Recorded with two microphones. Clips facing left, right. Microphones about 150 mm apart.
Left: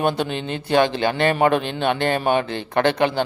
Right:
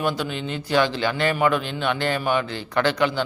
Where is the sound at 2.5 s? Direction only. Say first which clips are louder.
Left 3 dB; 20° left (ahead or behind).